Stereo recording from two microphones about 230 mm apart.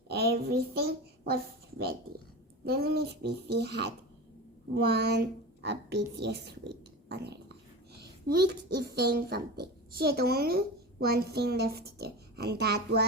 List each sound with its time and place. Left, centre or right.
0.1 s a woman's voice: right
2.6 s a child's voice: right